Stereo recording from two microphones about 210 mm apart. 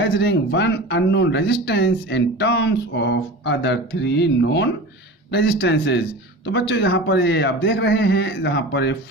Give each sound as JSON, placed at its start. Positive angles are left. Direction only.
{"t": 0.0, "sound": "speech", "side_deg": 55}